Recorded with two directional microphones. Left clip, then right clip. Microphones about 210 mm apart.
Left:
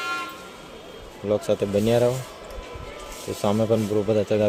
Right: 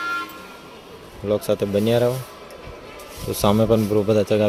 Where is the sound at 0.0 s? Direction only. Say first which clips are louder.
Right 3 dB; 50° left (ahead or behind).